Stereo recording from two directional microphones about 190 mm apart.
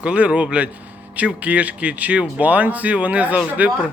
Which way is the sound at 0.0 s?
5° right (ahead or behind).